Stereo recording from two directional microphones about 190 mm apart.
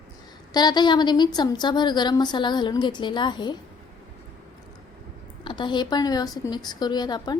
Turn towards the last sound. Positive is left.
turn(degrees=20)  # may be behind; listen again after turning